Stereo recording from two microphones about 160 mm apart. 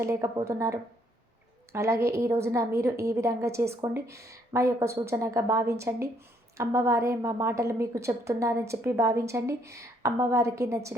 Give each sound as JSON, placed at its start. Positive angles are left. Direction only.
{"t": 0.0, "sound": "a woman's voice", "side_deg": -20}